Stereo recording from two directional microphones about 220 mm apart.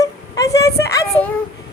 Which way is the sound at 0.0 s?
15° left (ahead or behind).